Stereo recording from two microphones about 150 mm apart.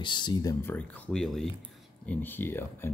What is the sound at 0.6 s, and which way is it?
Speech, 10° left (ahead or behind).